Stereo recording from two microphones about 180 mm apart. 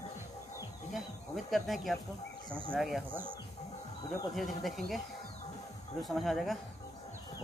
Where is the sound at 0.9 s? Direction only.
Centre (ahead or behind).